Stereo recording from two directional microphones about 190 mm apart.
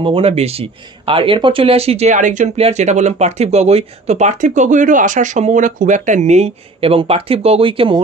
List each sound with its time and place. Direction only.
0.0 s speech: 30° right (ahead or behind)